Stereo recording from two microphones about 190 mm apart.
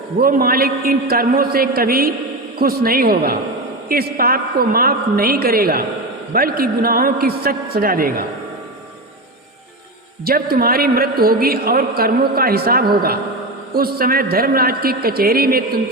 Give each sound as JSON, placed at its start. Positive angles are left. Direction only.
{"t": 0.2, "sound": "a man's voice", "side_deg": -50}
{"t": 10.2, "sound": "a man's voice", "side_deg": -50}